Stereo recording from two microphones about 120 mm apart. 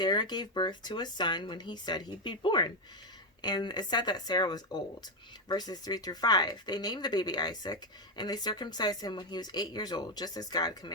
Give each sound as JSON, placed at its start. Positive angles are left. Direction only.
{"t": 0.0, "sound": "speech", "side_deg": 35}